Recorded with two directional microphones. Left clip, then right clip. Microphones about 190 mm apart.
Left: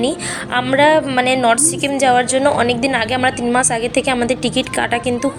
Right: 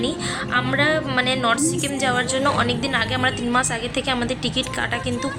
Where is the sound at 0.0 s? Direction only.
25° left (ahead or behind).